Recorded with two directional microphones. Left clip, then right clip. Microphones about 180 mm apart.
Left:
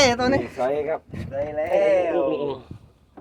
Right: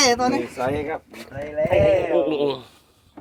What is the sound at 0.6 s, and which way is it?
Speech, 20° left (ahead or behind).